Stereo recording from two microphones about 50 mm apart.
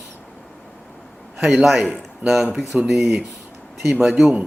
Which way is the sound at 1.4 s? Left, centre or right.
Centre.